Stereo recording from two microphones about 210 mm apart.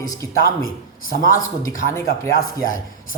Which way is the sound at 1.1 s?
40° left (ahead or behind).